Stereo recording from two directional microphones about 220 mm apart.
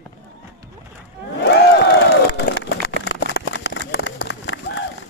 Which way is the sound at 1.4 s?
50° left (ahead or behind).